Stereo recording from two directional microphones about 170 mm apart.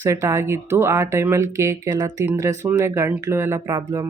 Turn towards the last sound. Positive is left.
turn(degrees=-20)  # may be behind; listen again after turning